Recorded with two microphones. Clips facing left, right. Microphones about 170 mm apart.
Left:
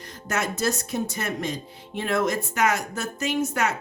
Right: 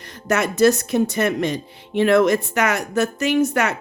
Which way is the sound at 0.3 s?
70° right (ahead or behind).